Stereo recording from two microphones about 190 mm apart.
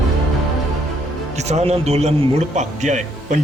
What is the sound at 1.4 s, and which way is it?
A man's voice, 35° right (ahead or behind).